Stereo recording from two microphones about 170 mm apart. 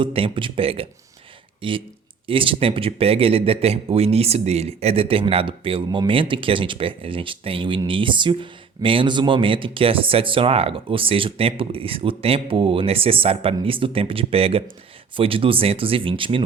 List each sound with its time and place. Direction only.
0.0 s speech: 30° right (ahead or behind)